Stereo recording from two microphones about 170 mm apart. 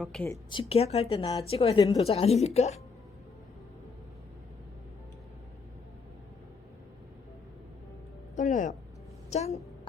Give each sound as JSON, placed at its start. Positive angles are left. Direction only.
{"t": 0.0, "sound": "speech", "side_deg": 5}
{"t": 0.5, "sound": "speech", "side_deg": 35}
{"t": 8.4, "sound": "a woman's voice", "side_deg": 50}